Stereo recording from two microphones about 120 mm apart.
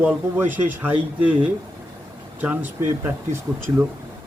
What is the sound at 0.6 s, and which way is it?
Speech, 15° right (ahead or behind).